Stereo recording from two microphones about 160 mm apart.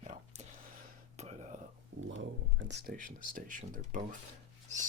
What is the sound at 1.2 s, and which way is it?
Whispering, 40° right (ahead or behind).